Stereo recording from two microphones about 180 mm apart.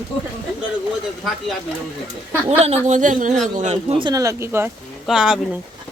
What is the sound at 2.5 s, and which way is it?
Speech, 35° right (ahead or behind).